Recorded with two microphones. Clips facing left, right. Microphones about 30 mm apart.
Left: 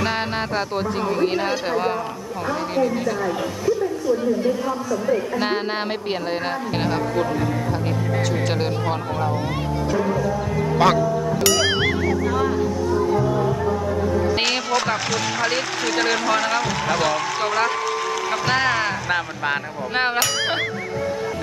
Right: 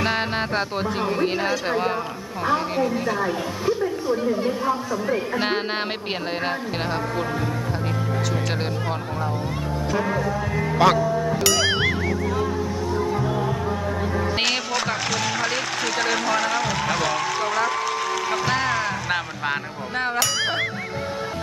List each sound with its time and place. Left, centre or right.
0.0 s speech: centre
4.2 s speech: right
10.1 s speech: right
10.7 s speech: centre
11.2 s music: centre
14.0 s music: right
14.3 s speech: centre